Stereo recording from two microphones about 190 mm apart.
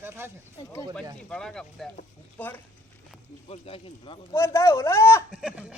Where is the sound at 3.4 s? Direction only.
30° left (ahead or behind).